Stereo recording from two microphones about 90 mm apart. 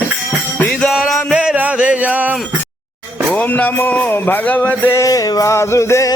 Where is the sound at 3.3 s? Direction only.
15° left (ahead or behind).